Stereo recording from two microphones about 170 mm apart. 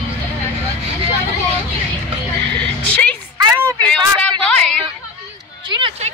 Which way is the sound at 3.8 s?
5° left (ahead or behind).